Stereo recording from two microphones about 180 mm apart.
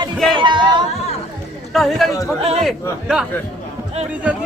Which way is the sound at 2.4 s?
35° right (ahead or behind).